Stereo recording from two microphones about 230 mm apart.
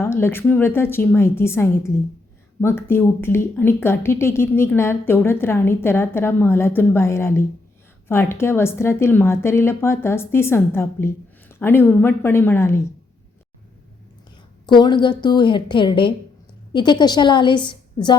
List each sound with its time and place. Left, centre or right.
0.0 s speech: centre
14.7 s a woman's voice: centre